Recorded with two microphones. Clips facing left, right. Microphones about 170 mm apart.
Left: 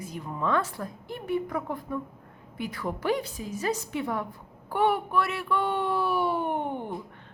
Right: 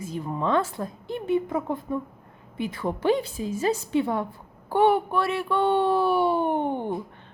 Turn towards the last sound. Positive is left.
turn(degrees=-30)  # may be behind; listen again after turning